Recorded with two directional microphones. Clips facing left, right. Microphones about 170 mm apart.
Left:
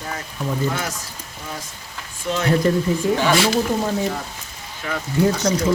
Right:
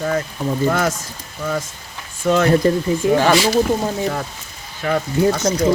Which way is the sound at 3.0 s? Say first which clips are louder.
Right 7 dB; 20° right (ahead or behind).